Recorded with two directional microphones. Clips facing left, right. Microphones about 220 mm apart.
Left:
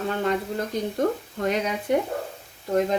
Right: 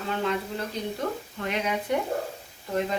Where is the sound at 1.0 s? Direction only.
40° left (ahead or behind).